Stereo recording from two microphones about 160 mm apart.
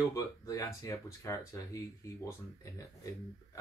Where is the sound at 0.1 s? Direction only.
20° left (ahead or behind).